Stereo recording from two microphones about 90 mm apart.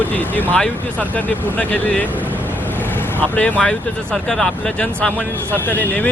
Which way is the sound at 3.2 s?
15° left (ahead or behind).